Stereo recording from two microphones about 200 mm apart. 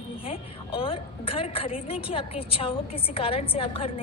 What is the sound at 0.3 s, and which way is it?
A woman's voice, 25° left (ahead or behind).